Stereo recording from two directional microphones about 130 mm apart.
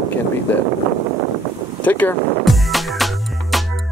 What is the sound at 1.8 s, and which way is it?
Speech, 15° left (ahead or behind).